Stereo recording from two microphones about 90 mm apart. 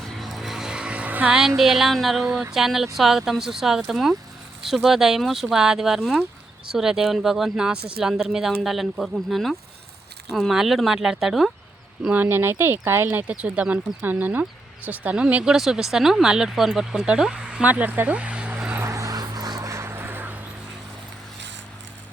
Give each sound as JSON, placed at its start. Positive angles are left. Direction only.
{"t": 0.0, "sound": "vehicle", "side_deg": 0}
{"t": 1.4, "sound": "speech", "side_deg": -5}
{"t": 12.0, "sound": "speech", "side_deg": -20}
{"t": 18.9, "sound": "vehicle", "side_deg": -35}
{"t": 19.7, "sound": "a sound", "side_deg": -30}